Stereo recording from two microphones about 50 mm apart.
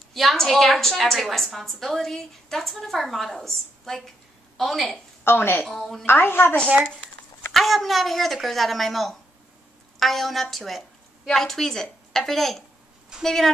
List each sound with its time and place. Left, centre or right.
0.1 s a woman's voice: centre
5.2 s a woman's voice: left
5.7 s a woman's voice: centre
6.0 s a woman's voice: left
7.5 s a woman's voice: centre